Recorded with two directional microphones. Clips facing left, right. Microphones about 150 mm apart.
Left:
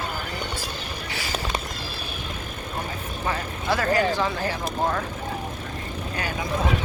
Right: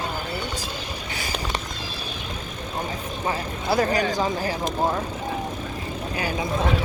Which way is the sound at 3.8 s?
15° right (ahead or behind).